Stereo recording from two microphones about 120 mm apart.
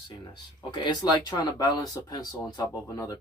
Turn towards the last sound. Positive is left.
turn(degrees=30)  # may be behind; listen again after turning